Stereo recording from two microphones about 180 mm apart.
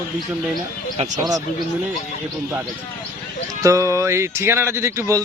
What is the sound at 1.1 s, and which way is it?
Speech, 20° right (ahead or behind).